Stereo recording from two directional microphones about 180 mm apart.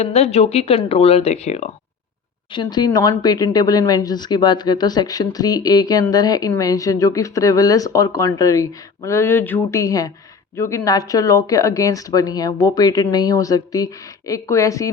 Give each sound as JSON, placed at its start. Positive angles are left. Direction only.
{"t": 0.0, "sound": "speech", "side_deg": 35}
{"t": 2.5, "sound": "speech", "side_deg": 25}